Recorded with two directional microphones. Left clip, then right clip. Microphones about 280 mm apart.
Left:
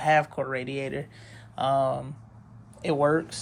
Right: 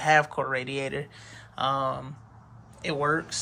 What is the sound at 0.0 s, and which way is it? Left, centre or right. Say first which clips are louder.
Speech: right 1 dB; centre.